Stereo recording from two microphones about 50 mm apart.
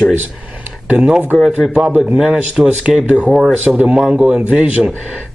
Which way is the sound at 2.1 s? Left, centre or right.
Centre.